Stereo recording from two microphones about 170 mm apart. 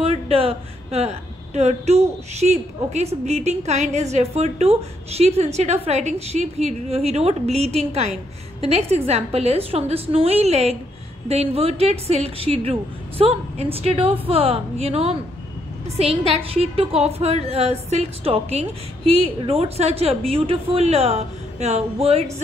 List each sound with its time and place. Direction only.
0.0 s a woman's voice: 35° right (ahead or behind)